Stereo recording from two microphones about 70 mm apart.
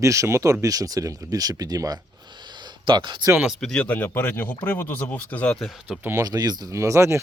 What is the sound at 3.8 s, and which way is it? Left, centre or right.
Speech, left.